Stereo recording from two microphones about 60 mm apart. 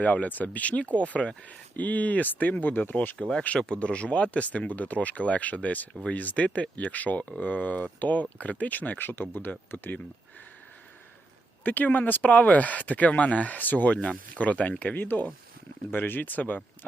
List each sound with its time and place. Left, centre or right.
0.0 s speech: left
3.2 s speech: centre
11.6 s speech: left